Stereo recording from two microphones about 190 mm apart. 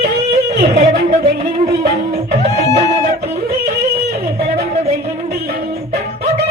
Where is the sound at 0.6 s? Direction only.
35° right (ahead or behind).